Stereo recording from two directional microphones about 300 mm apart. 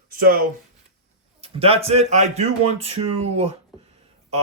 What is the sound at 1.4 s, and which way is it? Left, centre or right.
Speech, centre.